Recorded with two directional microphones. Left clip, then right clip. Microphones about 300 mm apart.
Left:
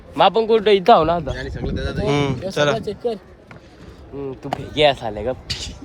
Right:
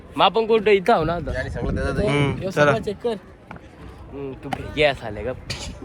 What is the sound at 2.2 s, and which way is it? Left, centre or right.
Speech, centre.